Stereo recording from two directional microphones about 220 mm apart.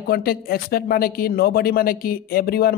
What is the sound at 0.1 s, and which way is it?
Speech, 45° left (ahead or behind).